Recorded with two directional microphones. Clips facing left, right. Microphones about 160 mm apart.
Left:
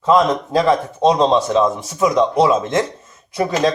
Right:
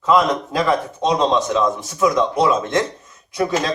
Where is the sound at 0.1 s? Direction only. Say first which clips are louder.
Left 2 dB; 25° left (ahead or behind).